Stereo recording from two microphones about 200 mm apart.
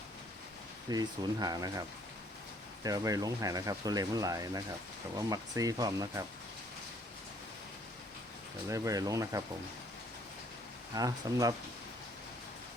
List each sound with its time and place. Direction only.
0.9 s speech: 20° right (ahead or behind)
2.8 s speech: 20° right (ahead or behind)
8.7 s speech: 15° right (ahead or behind)
10.9 s speech: 20° right (ahead or behind)